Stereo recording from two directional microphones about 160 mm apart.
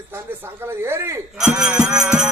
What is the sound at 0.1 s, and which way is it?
A man's voice, 15° right (ahead or behind).